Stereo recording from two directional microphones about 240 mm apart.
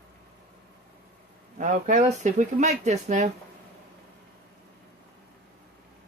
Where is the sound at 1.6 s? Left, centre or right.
Right.